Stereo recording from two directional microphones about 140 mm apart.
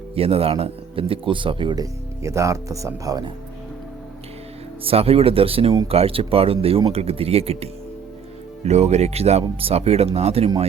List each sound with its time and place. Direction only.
0.1 s speech: 45° right (ahead or behind); by 3.3 s 30° right (ahead or behind)
4.8 s speech: 45° right (ahead or behind)